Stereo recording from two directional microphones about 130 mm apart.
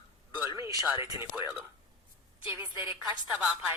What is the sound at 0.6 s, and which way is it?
Speech, 25° right (ahead or behind).